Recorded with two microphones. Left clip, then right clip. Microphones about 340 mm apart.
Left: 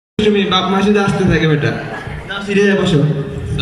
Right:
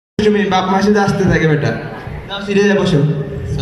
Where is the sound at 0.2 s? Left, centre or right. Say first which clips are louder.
Even; centre.